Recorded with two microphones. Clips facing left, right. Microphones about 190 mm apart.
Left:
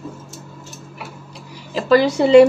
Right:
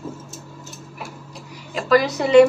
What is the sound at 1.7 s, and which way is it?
Speech, 30° left (ahead or behind).